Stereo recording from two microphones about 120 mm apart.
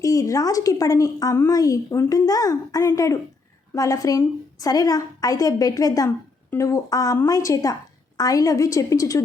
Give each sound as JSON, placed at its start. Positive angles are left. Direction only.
{"t": 0.0, "sound": "a woman's voice", "side_deg": 30}